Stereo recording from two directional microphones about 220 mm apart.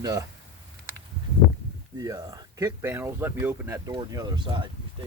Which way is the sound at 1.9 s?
15° right (ahead or behind).